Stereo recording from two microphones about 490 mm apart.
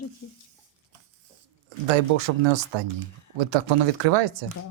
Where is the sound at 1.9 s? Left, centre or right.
Right.